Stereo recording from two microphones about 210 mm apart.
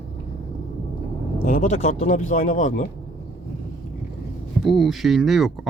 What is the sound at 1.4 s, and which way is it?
Speech, 40° left (ahead or behind).